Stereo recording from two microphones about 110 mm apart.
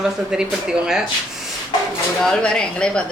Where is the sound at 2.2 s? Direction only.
5° left (ahead or behind).